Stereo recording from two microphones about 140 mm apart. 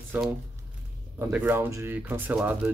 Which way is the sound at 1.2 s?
10° right (ahead or behind).